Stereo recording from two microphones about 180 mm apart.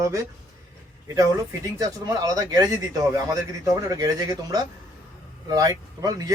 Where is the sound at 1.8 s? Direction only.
20° right (ahead or behind).